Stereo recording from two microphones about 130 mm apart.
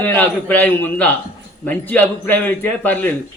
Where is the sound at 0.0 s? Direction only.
10° left (ahead or behind).